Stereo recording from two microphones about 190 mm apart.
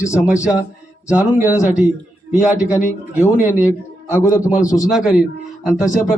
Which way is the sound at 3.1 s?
10° right (ahead or behind).